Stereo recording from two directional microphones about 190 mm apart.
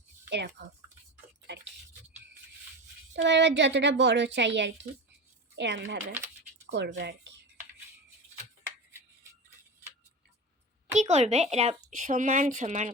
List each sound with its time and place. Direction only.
0.3 s speech: 65° right (ahead or behind)
1.5 s a sound: 65° right (ahead or behind)
3.2 s a child's voice: 65° right (ahead or behind)
10.9 s a woman's voice: 35° right (ahead or behind)